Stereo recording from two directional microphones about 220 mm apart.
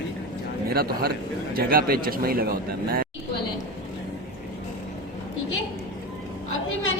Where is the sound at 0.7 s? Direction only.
45° right (ahead or behind).